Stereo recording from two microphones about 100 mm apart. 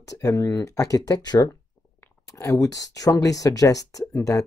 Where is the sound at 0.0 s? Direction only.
35° left (ahead or behind).